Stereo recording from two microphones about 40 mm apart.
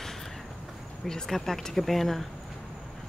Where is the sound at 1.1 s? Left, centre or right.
Centre.